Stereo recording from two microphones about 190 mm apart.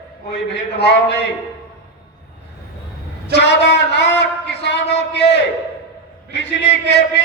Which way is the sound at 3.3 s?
65° left (ahead or behind).